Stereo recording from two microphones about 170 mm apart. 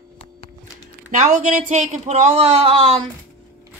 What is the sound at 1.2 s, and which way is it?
Speech, 45° right (ahead or behind).